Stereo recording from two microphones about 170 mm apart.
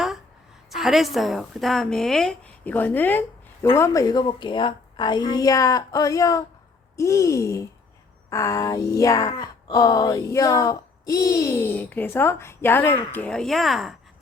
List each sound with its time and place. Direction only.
0.7 s a woman's voice: centre (ahead or behind); by 6.4 s 20° left (ahead or behind)
6.9 s a sound: 20° left (ahead or behind)
8.3 s speech: 20° left (ahead or behind); by 13.9 s centre (ahead or behind)